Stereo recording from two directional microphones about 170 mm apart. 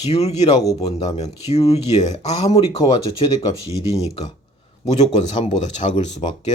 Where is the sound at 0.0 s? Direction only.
40° left (ahead or behind).